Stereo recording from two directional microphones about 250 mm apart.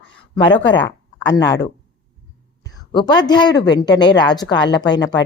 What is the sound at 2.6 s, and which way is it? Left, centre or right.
A woman's voice, centre.